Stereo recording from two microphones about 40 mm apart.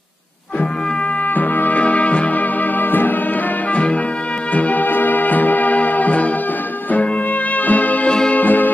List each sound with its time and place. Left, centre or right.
1.3 s brass instrument: left
1.8 s music: left
3.7 s brass instrument: left
4.6 s music: left
7.5 s music: left